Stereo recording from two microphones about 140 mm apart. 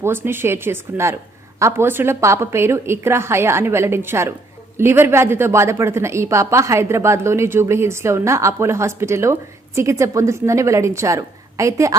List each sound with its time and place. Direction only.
0.0 s a woman's voice: 15° right (ahead or behind)